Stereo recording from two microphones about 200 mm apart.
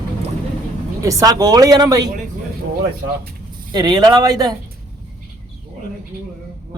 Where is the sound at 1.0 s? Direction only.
15° right (ahead or behind).